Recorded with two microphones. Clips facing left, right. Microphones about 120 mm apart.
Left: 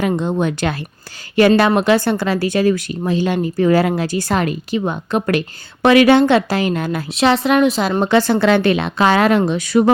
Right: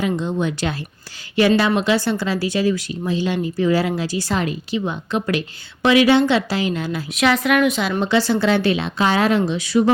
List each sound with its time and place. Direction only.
0.0 s a woman's voice: 55° left (ahead or behind)
7.1 s a woman's voice: 30° left (ahead or behind); by 9.9 s 50° left (ahead or behind)